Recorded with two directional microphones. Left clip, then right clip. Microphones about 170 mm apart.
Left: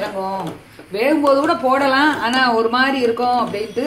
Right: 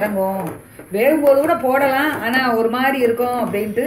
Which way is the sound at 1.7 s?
45° left (ahead or behind).